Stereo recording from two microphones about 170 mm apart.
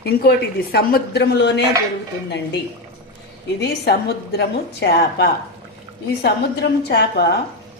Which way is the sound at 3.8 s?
70° left (ahead or behind).